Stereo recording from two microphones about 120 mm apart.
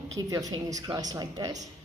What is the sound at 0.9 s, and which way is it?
Speech, 30° right (ahead or behind).